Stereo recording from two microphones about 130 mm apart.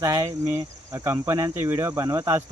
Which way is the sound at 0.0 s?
25° right (ahead or behind).